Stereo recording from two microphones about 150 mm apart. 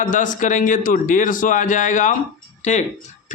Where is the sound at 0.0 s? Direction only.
60° left (ahead or behind).